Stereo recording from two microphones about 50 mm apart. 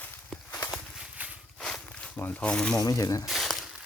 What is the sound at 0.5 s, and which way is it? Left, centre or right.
Walk, left.